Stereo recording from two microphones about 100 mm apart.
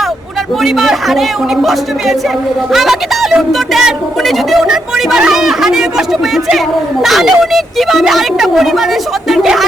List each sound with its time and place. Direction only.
0.6 s a woman's voice: centre (ahead or behind)
2.7 s a woman's voice: centre (ahead or behind)